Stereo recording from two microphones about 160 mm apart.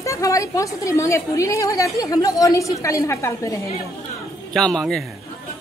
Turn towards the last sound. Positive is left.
turn(degrees=5)  # may be behind; listen again after turning